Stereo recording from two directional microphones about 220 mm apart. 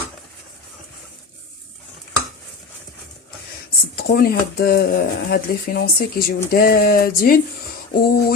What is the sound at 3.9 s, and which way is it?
Speech, 45° left (ahead or behind).